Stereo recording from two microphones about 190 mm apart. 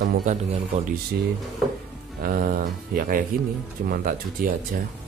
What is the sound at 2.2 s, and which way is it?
Speech, 50° right (ahead or behind).